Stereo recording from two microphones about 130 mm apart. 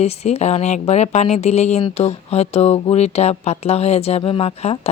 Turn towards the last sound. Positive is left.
turn(degrees=50)  # may be behind; listen again after turning